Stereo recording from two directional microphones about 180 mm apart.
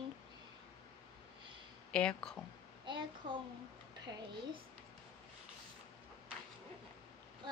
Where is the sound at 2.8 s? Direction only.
25° right (ahead or behind).